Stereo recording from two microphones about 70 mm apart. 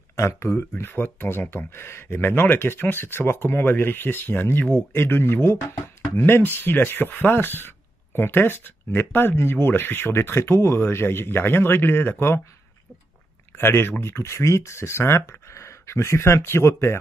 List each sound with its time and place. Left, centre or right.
0.1 s speech: left
13.6 s speech: left